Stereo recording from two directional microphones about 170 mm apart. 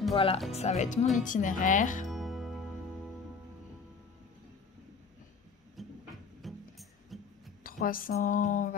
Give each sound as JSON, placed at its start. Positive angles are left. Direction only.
{"t": 0.1, "sound": "speech", "side_deg": 35}
{"t": 2.0, "sound": "music", "side_deg": 0}
{"t": 5.8, "sound": "a sound", "side_deg": 0}
{"t": 6.4, "sound": "music", "side_deg": 0}
{"t": 7.6, "sound": "speech", "side_deg": 55}